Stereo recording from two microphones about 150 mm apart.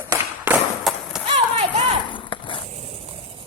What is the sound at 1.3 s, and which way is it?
Run, 45° right (ahead or behind).